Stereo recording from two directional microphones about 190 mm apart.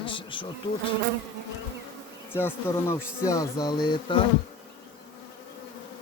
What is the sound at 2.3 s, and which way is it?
Speech, 10° left (ahead or behind).